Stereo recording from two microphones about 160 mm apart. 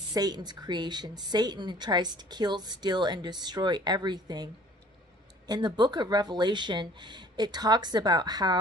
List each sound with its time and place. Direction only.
0.1 s a woman's voice: 25° right (ahead or behind)
5.5 s a woman's voice: 25° right (ahead or behind)